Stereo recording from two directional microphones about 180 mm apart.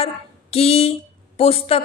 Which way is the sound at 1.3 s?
35° left (ahead or behind).